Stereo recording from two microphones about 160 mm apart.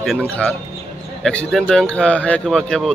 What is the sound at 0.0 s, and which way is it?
Speech, 5° left (ahead or behind).